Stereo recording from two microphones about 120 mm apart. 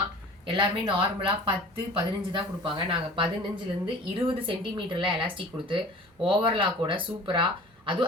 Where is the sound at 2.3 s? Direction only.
40° right (ahead or behind).